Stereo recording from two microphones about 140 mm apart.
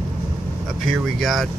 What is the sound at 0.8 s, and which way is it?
Speech, centre (ahead or behind).